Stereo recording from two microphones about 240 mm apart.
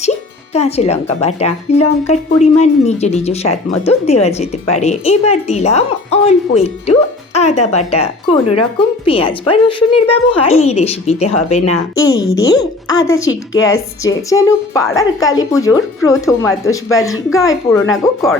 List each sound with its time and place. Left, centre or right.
0.5 s a woman's voice: left
7.3 s music: left
7.7 s a woman's voice: left
9.0 s a woman's voice: left
11.9 s speech: centre
17.7 s speech: centre